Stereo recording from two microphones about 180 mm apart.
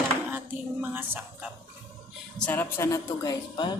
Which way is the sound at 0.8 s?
10° right (ahead or behind).